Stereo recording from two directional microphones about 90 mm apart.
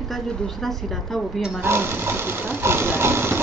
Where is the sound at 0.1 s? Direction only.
5° left (ahead or behind).